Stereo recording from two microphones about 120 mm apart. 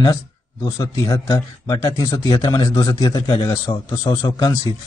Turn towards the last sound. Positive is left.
turn(degrees=30)  # may be behind; listen again after turning